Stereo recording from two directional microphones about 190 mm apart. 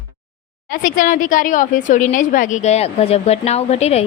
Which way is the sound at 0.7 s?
45° left (ahead or behind).